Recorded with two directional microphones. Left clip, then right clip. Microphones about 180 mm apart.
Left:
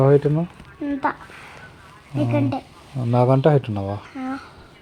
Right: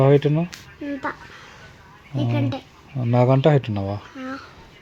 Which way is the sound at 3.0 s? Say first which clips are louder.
Left 1 dB; 20° right (ahead or behind).